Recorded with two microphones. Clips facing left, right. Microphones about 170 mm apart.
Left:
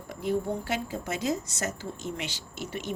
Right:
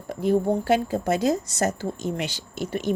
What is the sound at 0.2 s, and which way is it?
Speech, 35° right (ahead or behind).